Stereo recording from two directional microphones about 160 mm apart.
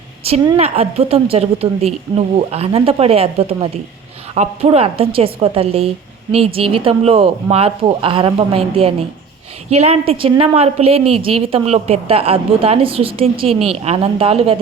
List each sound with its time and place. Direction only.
0.4 s a woman's voice: 35° right (ahead or behind)